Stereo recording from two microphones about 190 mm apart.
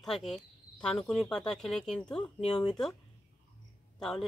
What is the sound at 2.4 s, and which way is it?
Speech, 35° left (ahead or behind).